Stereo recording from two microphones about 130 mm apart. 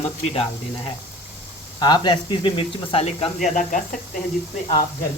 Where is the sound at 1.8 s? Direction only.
35° left (ahead or behind).